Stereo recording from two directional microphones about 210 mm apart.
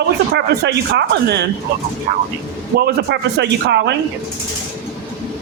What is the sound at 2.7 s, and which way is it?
A man's voice, 50° right (ahead or behind).